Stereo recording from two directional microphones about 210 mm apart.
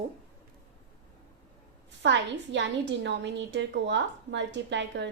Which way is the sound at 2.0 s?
60° right (ahead or behind).